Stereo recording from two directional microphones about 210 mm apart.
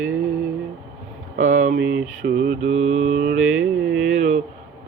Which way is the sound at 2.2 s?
45° right (ahead or behind).